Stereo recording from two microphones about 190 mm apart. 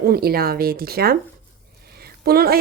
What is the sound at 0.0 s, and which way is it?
A woman's voice, 55° right (ahead or behind).